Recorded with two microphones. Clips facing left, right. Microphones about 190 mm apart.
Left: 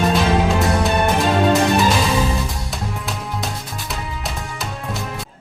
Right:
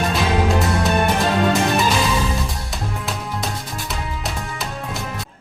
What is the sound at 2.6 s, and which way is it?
Music, centre (ahead or behind).